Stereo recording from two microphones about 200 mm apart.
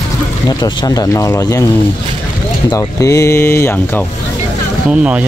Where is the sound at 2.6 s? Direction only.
15° left (ahead or behind).